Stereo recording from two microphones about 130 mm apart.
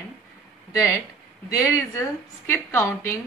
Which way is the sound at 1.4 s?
20° left (ahead or behind).